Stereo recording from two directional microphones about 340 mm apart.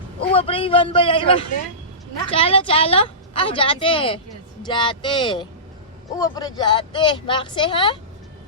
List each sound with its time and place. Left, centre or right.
0.3 s a woman's voice: centre